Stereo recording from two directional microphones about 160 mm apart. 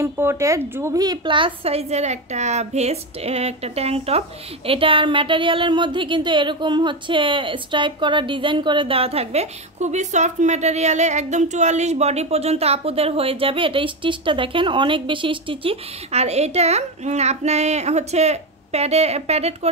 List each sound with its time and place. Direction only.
0.0 s speech: 15° right (ahead or behind); by 19.7 s 40° right (ahead or behind)